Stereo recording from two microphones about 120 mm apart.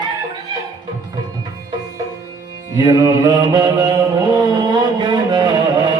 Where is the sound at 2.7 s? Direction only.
30° right (ahead or behind).